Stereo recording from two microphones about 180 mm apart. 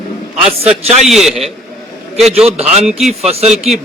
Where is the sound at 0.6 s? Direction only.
35° right (ahead or behind).